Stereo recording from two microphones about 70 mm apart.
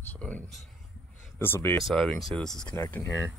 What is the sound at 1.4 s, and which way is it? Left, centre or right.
Speech, left.